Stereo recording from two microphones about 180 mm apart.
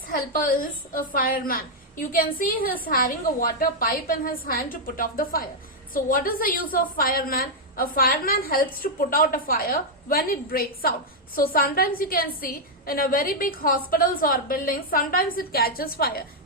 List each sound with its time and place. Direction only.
0.1 s a woman's voice: 50° left (ahead or behind)